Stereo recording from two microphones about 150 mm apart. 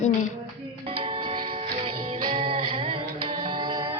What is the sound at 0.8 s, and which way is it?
Music, 35° right (ahead or behind).